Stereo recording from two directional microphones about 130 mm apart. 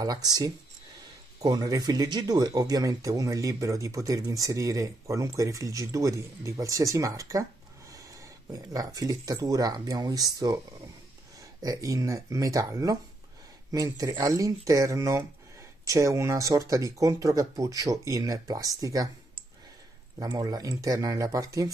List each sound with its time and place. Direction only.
0.0 s speech: 30° right (ahead or behind)
11.6 s speech: 25° right (ahead or behind)